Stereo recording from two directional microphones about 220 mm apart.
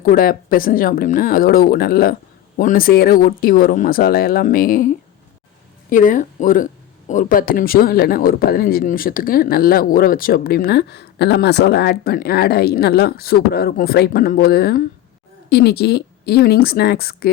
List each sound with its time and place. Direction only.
0.0 s speech: 40° left (ahead or behind)
5.9 s speech: 35° left (ahead or behind)